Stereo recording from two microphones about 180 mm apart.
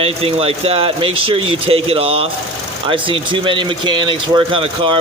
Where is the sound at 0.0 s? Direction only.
35° right (ahead or behind).